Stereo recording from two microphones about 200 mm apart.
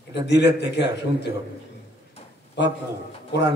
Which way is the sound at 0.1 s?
60° left (ahead or behind).